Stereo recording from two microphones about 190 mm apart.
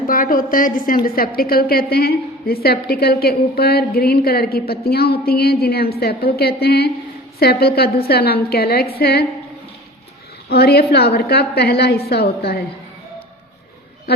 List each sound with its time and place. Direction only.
0.1 s a woman's voice: 45° left (ahead or behind)
10.5 s a woman's voice: 55° left (ahead or behind)